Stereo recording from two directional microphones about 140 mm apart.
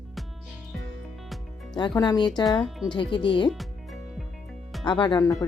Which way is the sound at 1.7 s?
30° left (ahead or behind).